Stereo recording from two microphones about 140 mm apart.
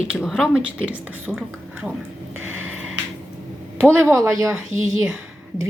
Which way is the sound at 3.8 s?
15° right (ahead or behind).